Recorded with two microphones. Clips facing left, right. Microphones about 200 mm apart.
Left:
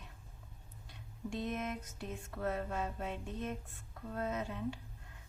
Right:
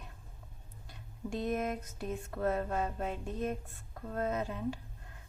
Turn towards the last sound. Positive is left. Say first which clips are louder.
# right 4 dB
turn(degrees=-50)  # may be behind; listen again after turning